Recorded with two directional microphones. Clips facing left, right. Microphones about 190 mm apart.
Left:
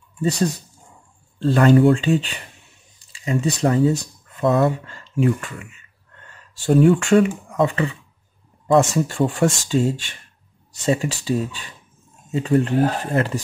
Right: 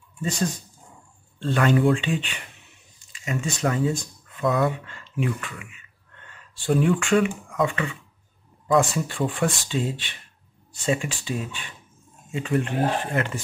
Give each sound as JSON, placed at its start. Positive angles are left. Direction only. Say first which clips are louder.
{"t": 0.2, "sound": "speech", "louder": "left 6 dB", "side_deg": 40}